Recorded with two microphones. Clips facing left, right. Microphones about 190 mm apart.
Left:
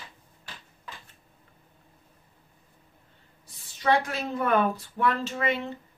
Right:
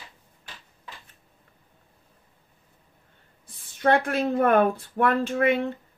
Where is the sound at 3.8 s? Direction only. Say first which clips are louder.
Right 4 dB; 55° right (ahead or behind).